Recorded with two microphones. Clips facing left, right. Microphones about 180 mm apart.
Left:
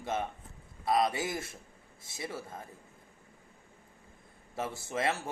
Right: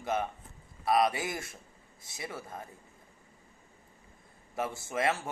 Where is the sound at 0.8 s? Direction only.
25° left (ahead or behind).